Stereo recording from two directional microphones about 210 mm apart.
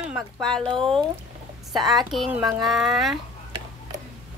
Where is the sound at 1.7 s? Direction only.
Centre (ahead or behind).